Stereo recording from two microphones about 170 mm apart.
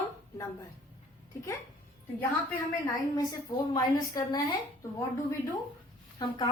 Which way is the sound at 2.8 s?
25° left (ahead or behind).